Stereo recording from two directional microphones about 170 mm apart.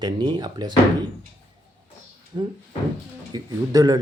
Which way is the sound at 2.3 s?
25° right (ahead or behind).